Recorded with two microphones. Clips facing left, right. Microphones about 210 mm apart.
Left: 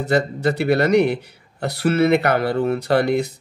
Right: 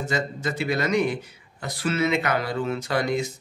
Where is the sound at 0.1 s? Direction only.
65° left (ahead or behind).